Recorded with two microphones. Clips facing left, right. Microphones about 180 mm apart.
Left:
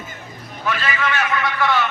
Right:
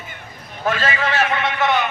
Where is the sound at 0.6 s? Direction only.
45° right (ahead or behind); by 1.8 s 20° right (ahead or behind).